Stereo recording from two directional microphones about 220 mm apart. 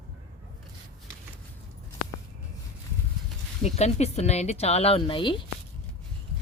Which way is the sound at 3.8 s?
30° left (ahead or behind).